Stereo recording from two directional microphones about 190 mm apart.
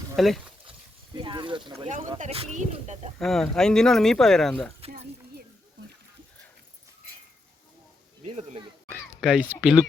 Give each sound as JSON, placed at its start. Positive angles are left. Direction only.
{"t": 0.2, "sound": "speech", "side_deg": 0}
{"t": 1.1, "sound": "speech", "side_deg": -25}
{"t": 2.1, "sound": "speech", "side_deg": -35}
{"t": 3.2, "sound": "speech", "side_deg": 0}
{"t": 8.2, "sound": "speech", "side_deg": -35}
{"t": 8.9, "sound": "speech", "side_deg": -5}